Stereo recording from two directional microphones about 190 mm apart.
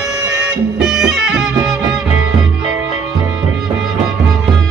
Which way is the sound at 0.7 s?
5° right (ahead or behind).